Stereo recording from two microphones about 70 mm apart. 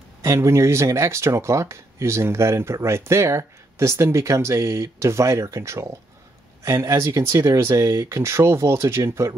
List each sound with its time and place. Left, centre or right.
0.2 s speech: right
7.2 s speech: right